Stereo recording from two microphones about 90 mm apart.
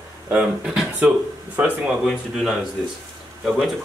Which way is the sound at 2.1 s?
5° left (ahead or behind).